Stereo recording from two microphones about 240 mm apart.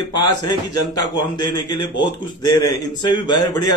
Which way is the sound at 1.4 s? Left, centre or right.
Centre.